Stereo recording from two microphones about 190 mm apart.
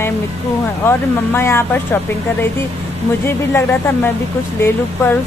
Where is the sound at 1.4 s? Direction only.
10° left (ahead or behind).